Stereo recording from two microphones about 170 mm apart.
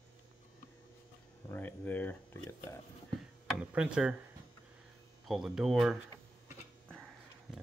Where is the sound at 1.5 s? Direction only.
10° left (ahead or behind).